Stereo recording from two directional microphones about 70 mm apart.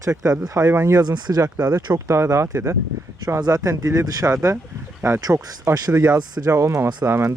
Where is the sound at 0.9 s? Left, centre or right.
Right.